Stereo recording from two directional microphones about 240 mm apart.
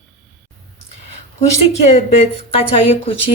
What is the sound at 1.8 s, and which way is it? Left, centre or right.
A woman's voice, left.